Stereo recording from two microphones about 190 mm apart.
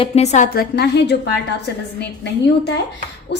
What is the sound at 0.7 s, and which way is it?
Speech, 60° left (ahead or behind).